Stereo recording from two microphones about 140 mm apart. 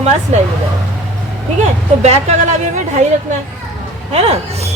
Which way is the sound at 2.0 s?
50° right (ahead or behind).